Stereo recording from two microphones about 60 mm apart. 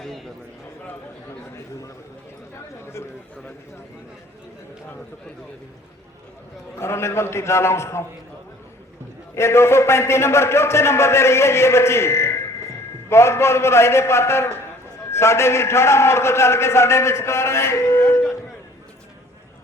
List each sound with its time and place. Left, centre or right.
6.7 s a man's voice: left
9.3 s a man's voice: left